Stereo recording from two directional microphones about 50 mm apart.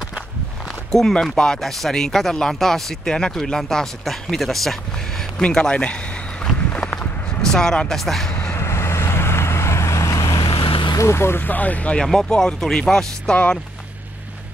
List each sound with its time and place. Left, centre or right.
0.9 s speech: centre
5.4 s speech: centre
6.4 s vehicle: centre
7.0 s a sound: centre
8.0 s speech: centre
8.5 s vehicle: left
11.0 s speech: left
11.3 s speech: left
12.0 s speech: centre
13.3 s speech: left